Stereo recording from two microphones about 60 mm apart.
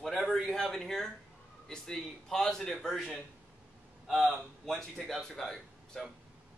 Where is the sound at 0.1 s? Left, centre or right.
Centre.